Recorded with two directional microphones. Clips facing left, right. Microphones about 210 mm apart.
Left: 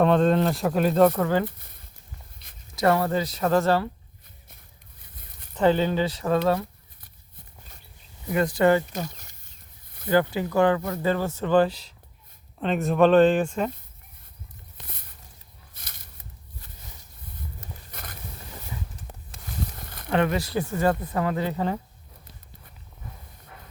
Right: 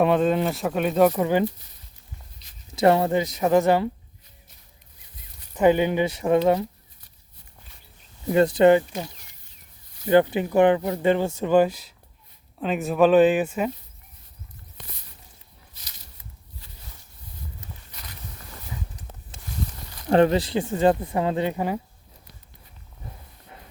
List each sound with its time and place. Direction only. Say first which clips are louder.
0.0 s speech: even; 5° right (ahead or behind)
1.2 s speech: right 2 dB; 15° right (ahead or behind)
1.5 s speech: right 8 dB; 55° left (ahead or behind)
2.4 s a sound: left 2 dB; 55° left (ahead or behind)
2.7 s speech: right 3 dB; 25° right (ahead or behind)
5.5 s speech: right 2 dB; 15° right (ahead or behind)
8.3 s speech: right 4 dB; 25° right (ahead or behind)
10.1 s speech: right 4 dB; 20° right (ahead or behind); by 13.7 s 5° right (ahead or behind)
15.7 s a sound: left 3 dB; 55° left (ahead or behind)
17.9 s a sound: left 3 dB; 50° left (ahead or behind)
19.8 s a sound: left 1 dB; 55° left (ahead or behind)
20.1 s speech: right 6 dB; 35° right (ahead or behind)
20.5 s speech: right 3 dB; 15° right (ahead or behind)